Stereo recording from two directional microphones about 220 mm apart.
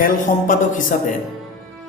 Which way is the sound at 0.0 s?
35° left (ahead or behind).